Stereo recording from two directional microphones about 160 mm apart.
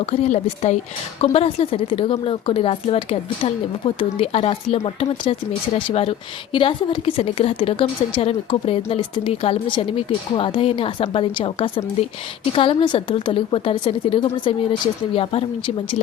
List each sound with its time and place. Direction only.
0.0 s speech: 40° left (ahead or behind)